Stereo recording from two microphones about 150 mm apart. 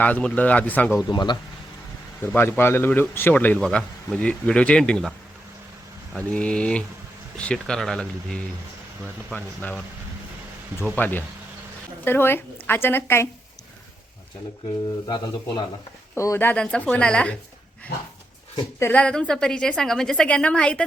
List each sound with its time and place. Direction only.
0.0 s a man's voice: 10° left (ahead or behind)
1.0 s speech: 30° left (ahead or behind)
2.2 s a man's voice: 15° left (ahead or behind)
6.1 s a man's voice: 5° left (ahead or behind)
10.9 s a man's voice: 10° left (ahead or behind)
15.0 s speech: 30° left (ahead or behind)
16.1 s a man's voice: 20° left (ahead or behind)
18.8 s a woman's voice: 10° left (ahead or behind)